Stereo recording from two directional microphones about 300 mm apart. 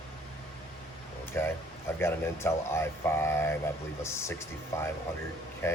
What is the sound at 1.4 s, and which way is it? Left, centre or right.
Speech, centre.